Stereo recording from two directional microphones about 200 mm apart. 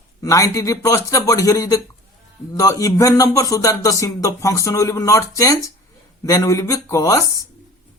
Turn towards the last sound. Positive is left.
turn(degrees=15)  # may be behind; listen again after turning